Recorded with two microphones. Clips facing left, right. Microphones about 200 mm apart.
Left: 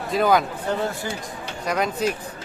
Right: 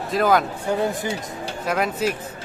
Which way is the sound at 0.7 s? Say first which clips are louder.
Right 3 dB; 15° right (ahead or behind).